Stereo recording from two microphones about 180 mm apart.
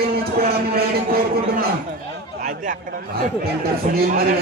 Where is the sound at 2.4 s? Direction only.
45° right (ahead or behind).